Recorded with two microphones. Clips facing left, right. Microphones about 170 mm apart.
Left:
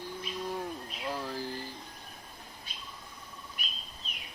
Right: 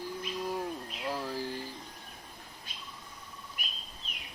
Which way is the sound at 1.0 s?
5° right (ahead or behind).